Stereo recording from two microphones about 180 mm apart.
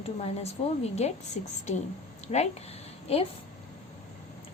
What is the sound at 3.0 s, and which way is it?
Speech, 35° left (ahead or behind).